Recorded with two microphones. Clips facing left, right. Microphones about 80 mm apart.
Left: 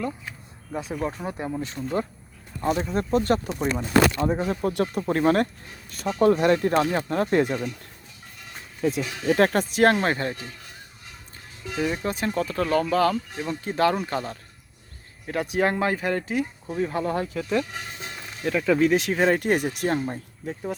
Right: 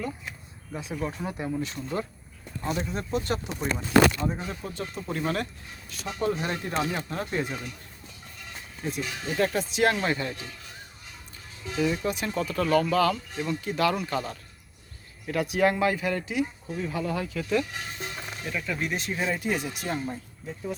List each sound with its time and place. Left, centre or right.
0.9 s speech: left
7.3 s speech: left
8.8 s speech: left
11.7 s speech: left
18.4 s speech: left